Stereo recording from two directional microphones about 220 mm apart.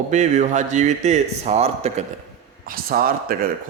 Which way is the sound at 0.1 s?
35° right (ahead or behind).